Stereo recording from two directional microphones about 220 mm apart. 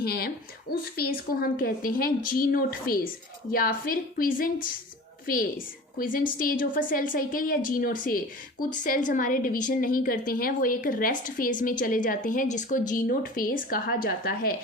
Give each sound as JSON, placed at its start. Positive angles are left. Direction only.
{"t": 0.0, "sound": "a woman's voice", "side_deg": 45}